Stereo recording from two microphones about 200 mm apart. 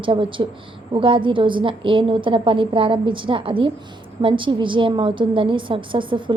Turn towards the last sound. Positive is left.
turn(degrees=-25)  # may be behind; listen again after turning